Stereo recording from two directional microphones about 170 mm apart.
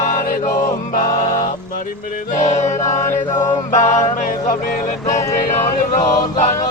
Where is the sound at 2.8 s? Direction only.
15° left (ahead or behind).